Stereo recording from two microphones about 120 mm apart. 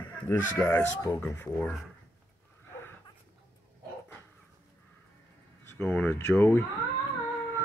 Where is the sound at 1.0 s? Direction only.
30° left (ahead or behind).